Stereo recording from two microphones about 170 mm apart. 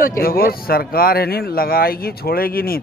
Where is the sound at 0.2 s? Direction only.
60° left (ahead or behind).